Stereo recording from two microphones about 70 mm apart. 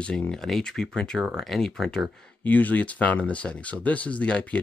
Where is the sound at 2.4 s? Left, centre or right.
Left.